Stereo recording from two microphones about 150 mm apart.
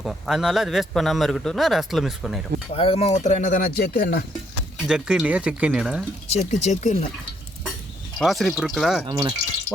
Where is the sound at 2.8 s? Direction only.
40° left (ahead or behind); by 4.2 s 90° left.